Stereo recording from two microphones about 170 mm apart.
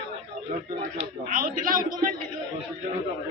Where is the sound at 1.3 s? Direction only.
55° right (ahead or behind).